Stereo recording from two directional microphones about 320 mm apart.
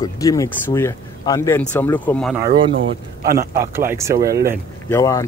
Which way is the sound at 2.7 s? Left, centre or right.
Right.